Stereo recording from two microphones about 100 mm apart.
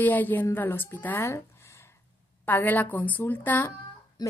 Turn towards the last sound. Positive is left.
turn(degrees=45)  # may be behind; listen again after turning